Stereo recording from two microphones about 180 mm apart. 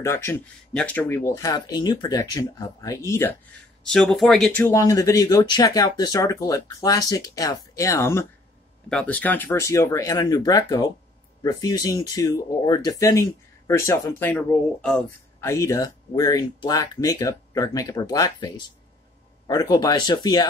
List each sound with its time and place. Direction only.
0.0 s speech: 15° left (ahead or behind)
3.8 s speech: centre (ahead or behind)
4.6 s speech: 20° left (ahead or behind)
15.4 s speech: 15° left (ahead or behind)